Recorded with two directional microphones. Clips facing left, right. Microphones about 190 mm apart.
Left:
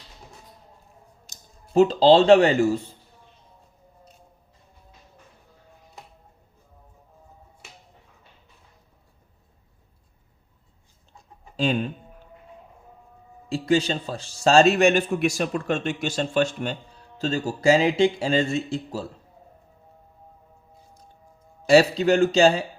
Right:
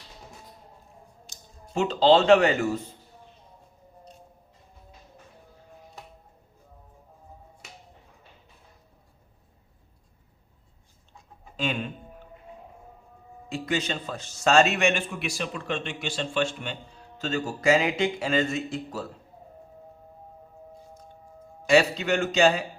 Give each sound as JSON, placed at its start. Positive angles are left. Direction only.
{"t": 1.3, "sound": "speech", "side_deg": 35}
{"t": 11.5, "sound": "speech", "side_deg": 35}
{"t": 13.5, "sound": "speech", "side_deg": 30}
{"t": 21.7, "sound": "speech", "side_deg": 35}